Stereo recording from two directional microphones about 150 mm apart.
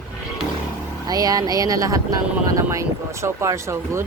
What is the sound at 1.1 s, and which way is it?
Speech, 25° right (ahead or behind).